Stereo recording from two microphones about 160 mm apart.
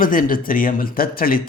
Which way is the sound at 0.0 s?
60° left (ahead or behind).